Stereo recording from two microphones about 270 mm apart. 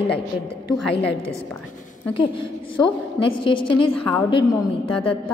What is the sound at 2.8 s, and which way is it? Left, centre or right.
A woman's voice, centre.